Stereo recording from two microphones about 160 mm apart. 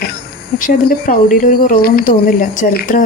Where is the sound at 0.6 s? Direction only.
65° left (ahead or behind).